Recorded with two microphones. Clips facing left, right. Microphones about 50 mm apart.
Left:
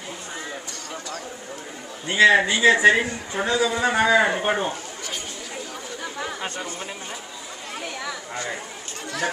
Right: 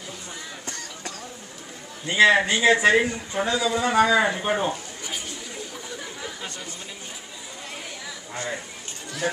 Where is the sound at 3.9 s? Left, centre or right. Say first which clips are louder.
Even; left.